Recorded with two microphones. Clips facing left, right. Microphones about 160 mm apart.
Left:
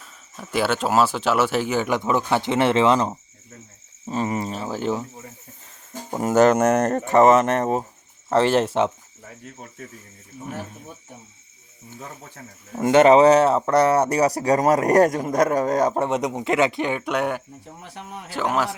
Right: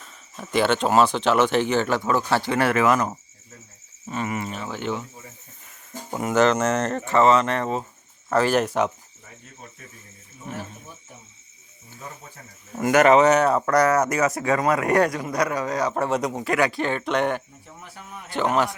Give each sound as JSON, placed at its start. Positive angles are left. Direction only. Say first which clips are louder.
{"t": 0.0, "sound": "speech", "louder": "right 1 dB", "side_deg": 5}
{"t": 6.1, "sound": "speech", "louder": "left 3 dB", "side_deg": 40}
{"t": 8.3, "sound": "speech", "louder": "left 2 dB", "side_deg": 25}
{"t": 12.8, "sound": "speech", "louder": "left 3 dB", "side_deg": 25}
{"t": 16.0, "sound": "a man's voice", "louder": "left 1 dB", "side_deg": 20}